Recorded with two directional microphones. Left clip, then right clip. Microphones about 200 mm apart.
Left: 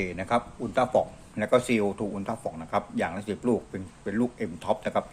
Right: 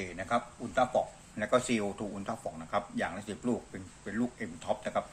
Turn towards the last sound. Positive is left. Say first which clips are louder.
# left 6 dB
turn(degrees=20)  # may be behind; listen again after turning